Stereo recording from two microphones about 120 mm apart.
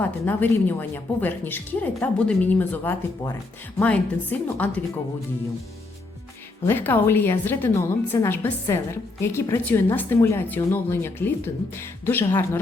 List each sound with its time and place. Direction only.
0.0 s a woman's voice: 15° left (ahead or behind)
6.7 s a woman's voice: 15° left (ahead or behind)